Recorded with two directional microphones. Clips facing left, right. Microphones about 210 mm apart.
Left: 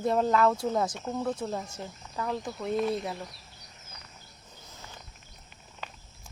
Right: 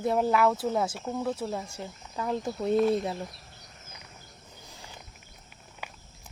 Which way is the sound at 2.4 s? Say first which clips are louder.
Right 5 dB; 30° right (ahead or behind).